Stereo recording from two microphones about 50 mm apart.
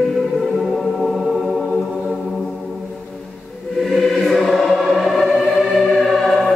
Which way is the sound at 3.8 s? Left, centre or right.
Centre.